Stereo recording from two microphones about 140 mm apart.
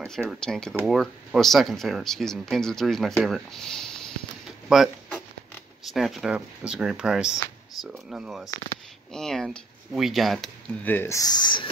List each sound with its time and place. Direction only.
0.0 s speech: 5° left (ahead or behind)
4.6 s a sound: 5° right (ahead or behind)
5.9 s speech: centre (ahead or behind)
10.8 s speech: 15° left (ahead or behind); by 11.7 s 35° left (ahead or behind)